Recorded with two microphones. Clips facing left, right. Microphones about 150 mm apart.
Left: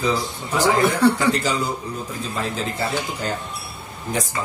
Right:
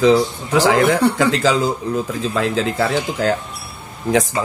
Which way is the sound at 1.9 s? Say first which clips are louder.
Right 8 dB; 90° right.